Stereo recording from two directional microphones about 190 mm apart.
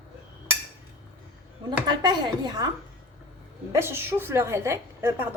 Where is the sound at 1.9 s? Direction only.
25° right (ahead or behind).